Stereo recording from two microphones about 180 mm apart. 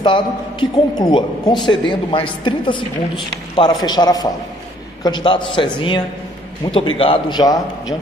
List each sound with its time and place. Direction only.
0.0 s a man's voice: 25° left (ahead or behind)